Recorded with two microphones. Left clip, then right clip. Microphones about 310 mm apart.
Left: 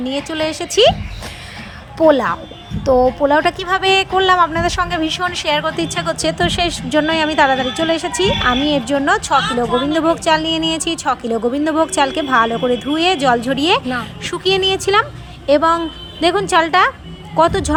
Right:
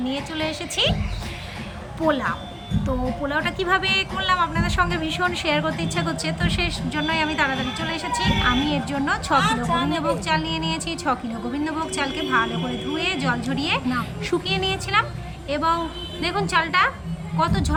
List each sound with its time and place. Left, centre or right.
0.1 s speech: centre
2.0 s speech: centre
9.4 s speech: centre
10.0 s speech: centre